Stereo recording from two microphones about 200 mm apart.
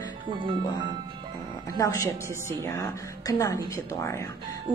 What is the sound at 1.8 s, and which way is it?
A woman's voice, 15° left (ahead or behind).